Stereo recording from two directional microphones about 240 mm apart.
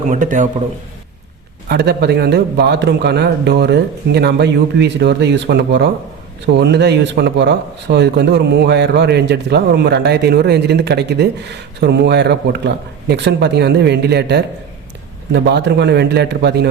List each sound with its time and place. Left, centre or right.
0.1 s a man's voice: right
1.7 s speech: right